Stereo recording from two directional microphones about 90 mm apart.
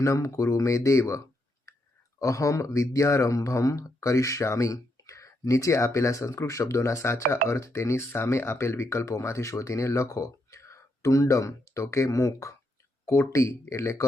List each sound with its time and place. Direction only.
0.0 s speech: 35° left (ahead or behind)